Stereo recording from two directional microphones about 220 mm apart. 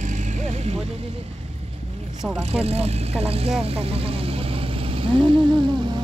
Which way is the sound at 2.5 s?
25° right (ahead or behind).